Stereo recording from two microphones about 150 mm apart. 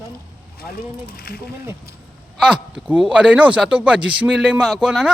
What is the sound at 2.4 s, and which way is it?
Speech, 5° right (ahead or behind).